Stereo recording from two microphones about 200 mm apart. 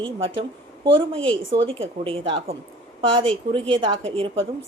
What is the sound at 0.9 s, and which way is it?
A woman's voice, 25° right (ahead or behind).